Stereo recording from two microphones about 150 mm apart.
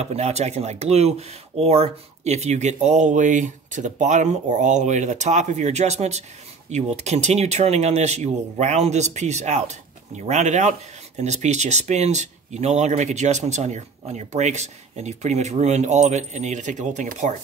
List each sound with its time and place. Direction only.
0.0 s speech: 45° right (ahead or behind)